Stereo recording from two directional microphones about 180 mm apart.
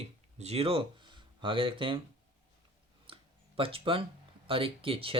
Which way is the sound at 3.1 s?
30° right (ahead or behind).